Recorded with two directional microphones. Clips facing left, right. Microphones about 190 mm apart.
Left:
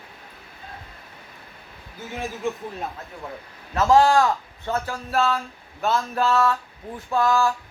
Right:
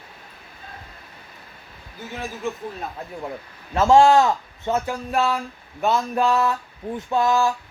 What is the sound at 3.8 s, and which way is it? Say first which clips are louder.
Speech: right 3 dB; 25° right (ahead or behind).